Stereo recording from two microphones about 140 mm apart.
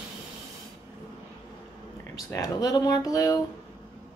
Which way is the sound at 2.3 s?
25° left (ahead or behind).